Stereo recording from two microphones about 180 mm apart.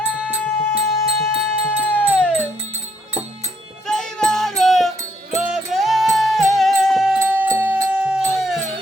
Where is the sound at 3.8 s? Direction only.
5° left (ahead or behind).